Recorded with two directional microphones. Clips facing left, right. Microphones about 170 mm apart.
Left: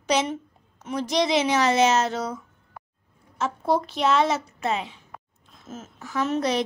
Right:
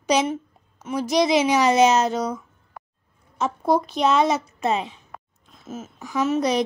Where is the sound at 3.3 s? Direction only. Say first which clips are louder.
Right 3 dB; 15° right (ahead or behind).